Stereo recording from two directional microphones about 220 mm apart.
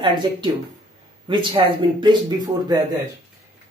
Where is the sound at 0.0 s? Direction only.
20° right (ahead or behind).